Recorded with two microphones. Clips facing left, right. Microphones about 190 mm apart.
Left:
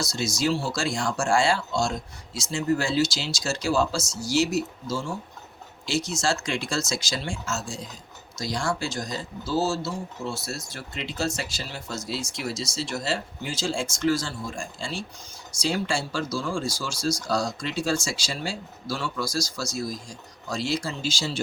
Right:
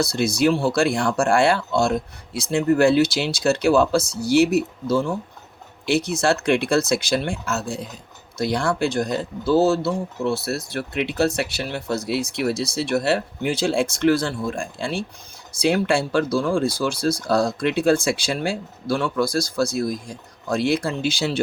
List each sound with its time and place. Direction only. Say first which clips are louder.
0.0 s speech: right 7 dB; 60° right (ahead or behind)